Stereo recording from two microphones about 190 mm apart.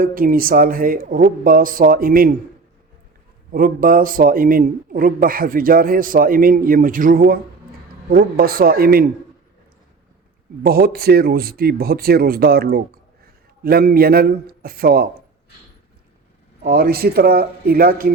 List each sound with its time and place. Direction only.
0.0 s speech: 50° right (ahead or behind)
3.5 s speech: 45° right (ahead or behind)
10.6 s speech: 50° right (ahead or behind)
16.6 s speech: 50° right (ahead or behind)